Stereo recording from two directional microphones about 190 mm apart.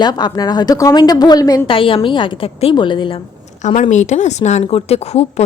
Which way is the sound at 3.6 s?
40° left (ahead or behind).